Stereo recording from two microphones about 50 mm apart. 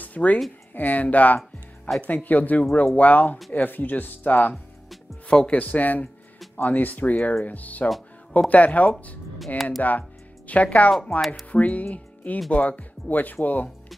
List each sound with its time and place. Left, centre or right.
0.0 s a sound: left
0.7 s speech: left
5.3 s speech: centre
5.6 s speech: left
9.6 s speech: centre
9.8 s speech: left
10.9 s speech: centre
11.5 s speech: left